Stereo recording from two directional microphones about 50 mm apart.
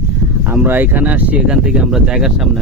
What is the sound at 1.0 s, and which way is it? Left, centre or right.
Speech, right.